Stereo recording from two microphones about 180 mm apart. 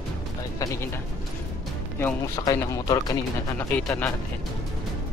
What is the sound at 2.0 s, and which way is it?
Speech, 15° left (ahead or behind).